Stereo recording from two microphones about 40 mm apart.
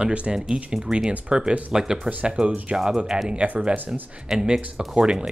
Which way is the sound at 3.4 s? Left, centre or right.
Right.